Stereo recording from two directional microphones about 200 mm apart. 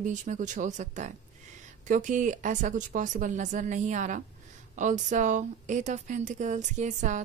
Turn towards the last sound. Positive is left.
turn(degrees=-35)  # may be behind; listen again after turning